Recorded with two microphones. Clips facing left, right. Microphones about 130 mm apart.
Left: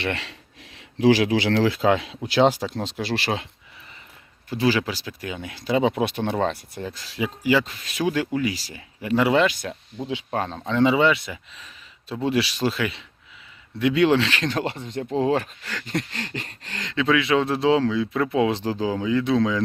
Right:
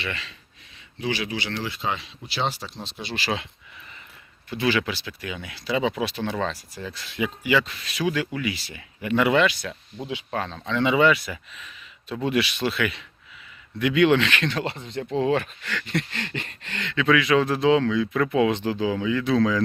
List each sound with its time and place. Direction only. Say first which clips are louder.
0.0 s speech: left 5 dB; 70° left (ahead or behind)
0.9 s speech: left 10 dB; 90° left
4.4 s speech: left 2 dB; 40° left (ahead or behind)
9.5 s speech: left 2 dB; 45° left (ahead or behind)
10.9 s speech: even; 25° left (ahead or behind)
19.2 s speech: right 2 dB; 20° left (ahead or behind)